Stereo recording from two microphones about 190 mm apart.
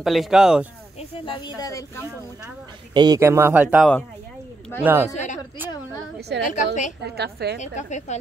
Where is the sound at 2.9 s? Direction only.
20° right (ahead or behind); by 3.9 s 5° right (ahead or behind).